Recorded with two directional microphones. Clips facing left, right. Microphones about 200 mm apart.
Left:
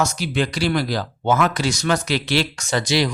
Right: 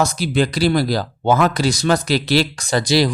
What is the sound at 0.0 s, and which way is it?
Speech, 35° right (ahead or behind).